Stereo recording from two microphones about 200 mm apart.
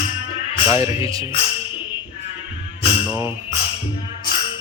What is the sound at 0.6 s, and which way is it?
Speech, 15° right (ahead or behind).